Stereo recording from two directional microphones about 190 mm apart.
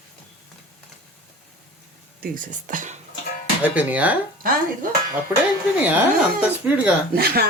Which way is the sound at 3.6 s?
5° right (ahead or behind).